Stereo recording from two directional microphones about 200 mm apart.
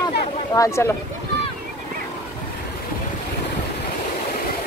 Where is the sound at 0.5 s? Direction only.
15° left (ahead or behind).